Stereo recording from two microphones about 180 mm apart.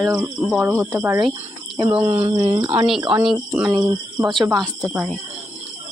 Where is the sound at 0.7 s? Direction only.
15° right (ahead or behind).